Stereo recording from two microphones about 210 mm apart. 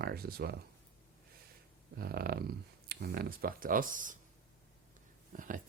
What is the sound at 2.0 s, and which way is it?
Speech, 45° right (ahead or behind).